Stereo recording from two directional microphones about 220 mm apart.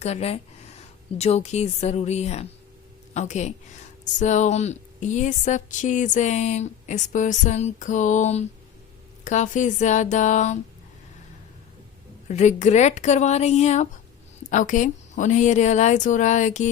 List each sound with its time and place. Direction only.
0.0 s a woman's voice: 30° left (ahead or behind)
12.3 s speech: 30° left (ahead or behind)